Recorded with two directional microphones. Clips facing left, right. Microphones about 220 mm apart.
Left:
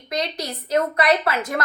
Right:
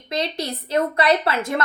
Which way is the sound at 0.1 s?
25° right (ahead or behind).